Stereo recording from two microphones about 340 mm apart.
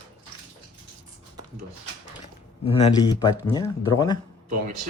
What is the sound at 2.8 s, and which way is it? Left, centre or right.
Speech, centre.